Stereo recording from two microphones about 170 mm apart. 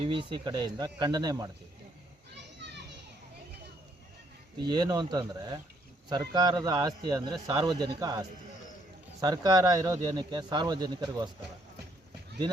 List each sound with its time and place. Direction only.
0.0 s speech: 30° right (ahead or behind)
2.3 s children playing: 90° right
4.7 s speech: 25° right (ahead or behind)